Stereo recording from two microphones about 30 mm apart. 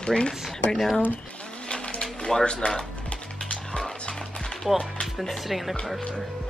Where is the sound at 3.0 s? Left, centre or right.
Left.